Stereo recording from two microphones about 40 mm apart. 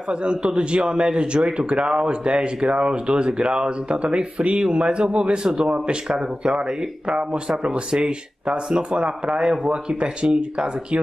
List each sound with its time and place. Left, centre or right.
0.1 s a man's voice: right